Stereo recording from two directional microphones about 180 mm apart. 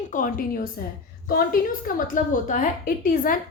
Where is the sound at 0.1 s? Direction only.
50° left (ahead or behind).